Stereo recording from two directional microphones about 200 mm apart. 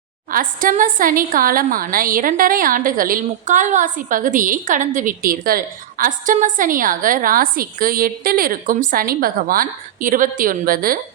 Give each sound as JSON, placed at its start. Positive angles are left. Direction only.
{"t": 0.3, "sound": "a woman's voice", "side_deg": -45}